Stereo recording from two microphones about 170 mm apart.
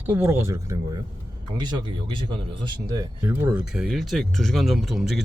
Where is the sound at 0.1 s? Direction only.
15° right (ahead or behind).